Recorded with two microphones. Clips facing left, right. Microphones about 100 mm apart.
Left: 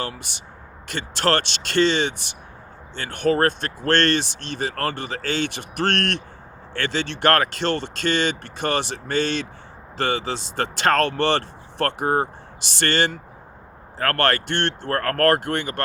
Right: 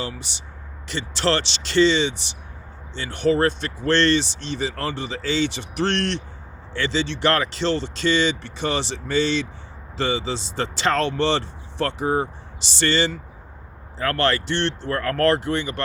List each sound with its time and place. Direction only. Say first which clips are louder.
0.0 s speech: left 1 dB; 55° left (ahead or behind)